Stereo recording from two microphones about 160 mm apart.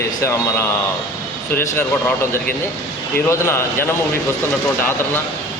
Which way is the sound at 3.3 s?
15° left (ahead or behind).